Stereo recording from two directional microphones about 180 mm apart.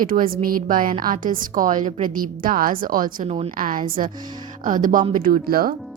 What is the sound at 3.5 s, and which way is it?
Speech, 50° right (ahead or behind).